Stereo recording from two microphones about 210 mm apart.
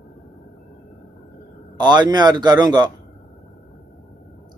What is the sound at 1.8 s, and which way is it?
A man's voice, 20° right (ahead or behind).